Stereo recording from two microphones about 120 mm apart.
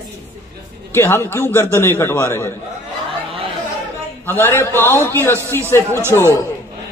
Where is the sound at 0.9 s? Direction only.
20° left (ahead or behind).